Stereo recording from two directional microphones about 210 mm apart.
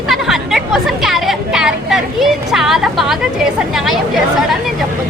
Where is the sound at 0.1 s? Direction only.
Centre (ahead or behind).